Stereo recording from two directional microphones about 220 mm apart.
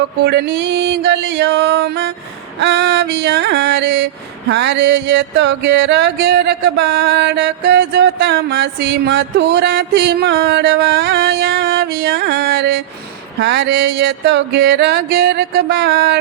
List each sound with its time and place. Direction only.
0.3 s music: 45° right (ahead or behind)